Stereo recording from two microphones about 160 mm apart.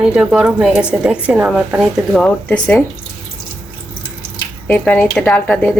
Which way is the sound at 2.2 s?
5° left (ahead or behind).